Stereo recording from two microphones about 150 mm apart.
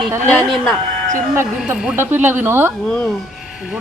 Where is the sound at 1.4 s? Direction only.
10° right (ahead or behind).